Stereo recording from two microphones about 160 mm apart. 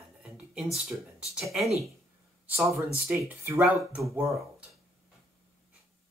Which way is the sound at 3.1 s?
15° right (ahead or behind).